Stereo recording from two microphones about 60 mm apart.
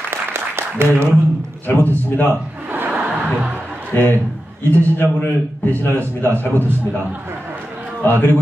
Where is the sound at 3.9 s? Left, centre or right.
Left.